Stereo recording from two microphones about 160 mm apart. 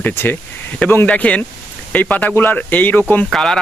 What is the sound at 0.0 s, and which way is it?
Speech, 10° left (ahead or behind).